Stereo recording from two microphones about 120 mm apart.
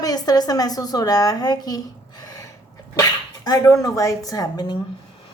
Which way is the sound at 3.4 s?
30° left (ahead or behind).